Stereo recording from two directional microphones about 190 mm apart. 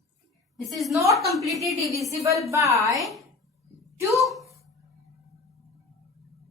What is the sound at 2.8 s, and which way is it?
A woman's voice, centre (ahead or behind).